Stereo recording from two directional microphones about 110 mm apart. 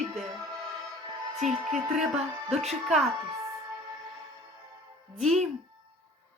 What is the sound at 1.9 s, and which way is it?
Speech, 5° right (ahead or behind).